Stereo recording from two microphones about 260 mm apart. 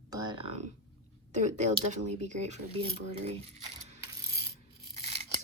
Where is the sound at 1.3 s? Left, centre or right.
Right.